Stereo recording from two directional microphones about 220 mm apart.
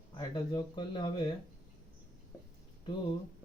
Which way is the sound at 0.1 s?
20° left (ahead or behind).